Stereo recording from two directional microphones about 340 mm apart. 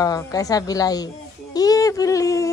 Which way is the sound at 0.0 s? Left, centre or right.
Centre.